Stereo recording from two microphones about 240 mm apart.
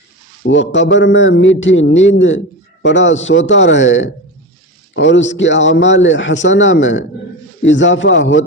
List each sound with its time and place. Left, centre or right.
0.4 s a man's voice: left